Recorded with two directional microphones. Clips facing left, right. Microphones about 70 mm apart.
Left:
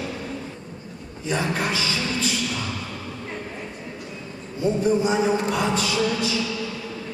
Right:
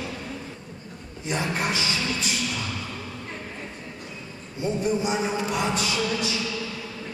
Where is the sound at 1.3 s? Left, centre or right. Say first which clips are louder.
Left 2 dB; left.